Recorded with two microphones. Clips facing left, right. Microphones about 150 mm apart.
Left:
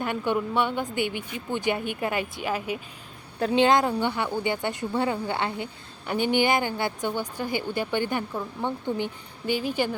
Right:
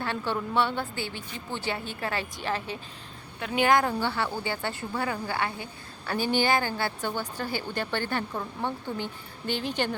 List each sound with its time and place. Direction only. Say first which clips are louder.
0.0 s a woman's voice: left 4 dB; 15° left (ahead or behind)
3.4 s a woman's voice: left 3 dB; 25° left (ahead or behind); by 9.9 s 10° left (ahead or behind)